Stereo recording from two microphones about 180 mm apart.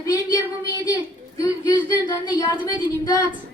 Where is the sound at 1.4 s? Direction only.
20° left (ahead or behind).